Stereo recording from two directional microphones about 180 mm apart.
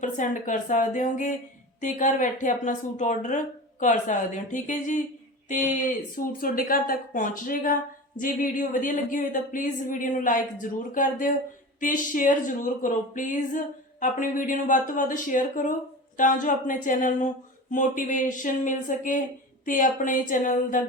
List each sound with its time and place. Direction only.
0.0 s a woman's voice: 45° left (ahead or behind)